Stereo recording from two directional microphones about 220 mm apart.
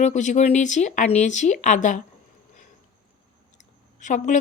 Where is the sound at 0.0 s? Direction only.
35° left (ahead or behind).